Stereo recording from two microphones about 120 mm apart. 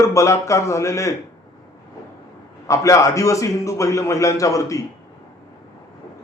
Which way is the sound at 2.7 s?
25° left (ahead or behind).